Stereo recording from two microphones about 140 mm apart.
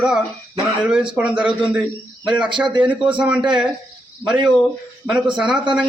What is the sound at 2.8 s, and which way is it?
A man's voice, 10° right (ahead or behind).